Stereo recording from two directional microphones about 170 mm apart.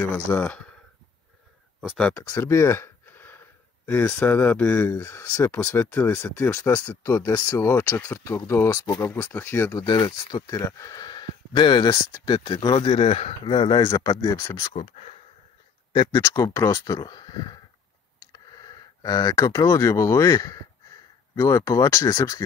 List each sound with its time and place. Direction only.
0.1 s speech: 15° left (ahead or behind)
1.8 s speech: centre (ahead or behind)
2.1 s speech: 20° left (ahead or behind)
9.8 s speech: 25° left (ahead or behind)
14.7 s speech: 40° left (ahead or behind)
16.0 s speech: 25° left (ahead or behind)